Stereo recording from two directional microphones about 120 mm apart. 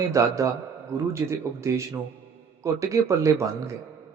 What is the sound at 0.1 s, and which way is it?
A man's voice, 25° right (ahead or behind).